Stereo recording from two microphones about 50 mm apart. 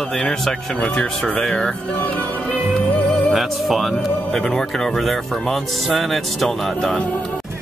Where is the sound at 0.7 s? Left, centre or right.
Left.